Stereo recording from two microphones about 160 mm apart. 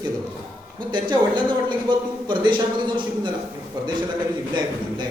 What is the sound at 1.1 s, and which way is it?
Speech, 30° right (ahead or behind).